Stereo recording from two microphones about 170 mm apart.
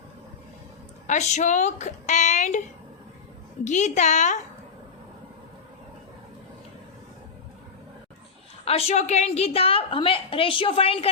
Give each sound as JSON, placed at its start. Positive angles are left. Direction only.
{"t": 1.0, "sound": "speech", "side_deg": 45}
{"t": 8.6, "sound": "a woman's voice", "side_deg": 35}